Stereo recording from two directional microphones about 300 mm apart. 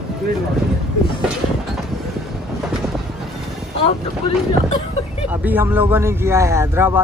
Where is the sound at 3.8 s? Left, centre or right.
Centre.